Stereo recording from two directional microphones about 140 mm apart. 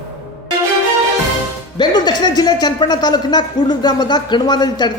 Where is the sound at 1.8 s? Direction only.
30° left (ahead or behind).